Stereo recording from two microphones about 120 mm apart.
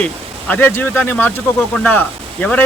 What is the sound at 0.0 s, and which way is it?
Speech, 15° left (ahead or behind).